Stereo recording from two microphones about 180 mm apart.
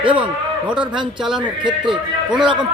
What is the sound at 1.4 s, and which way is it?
Speech, 25° right (ahead or behind).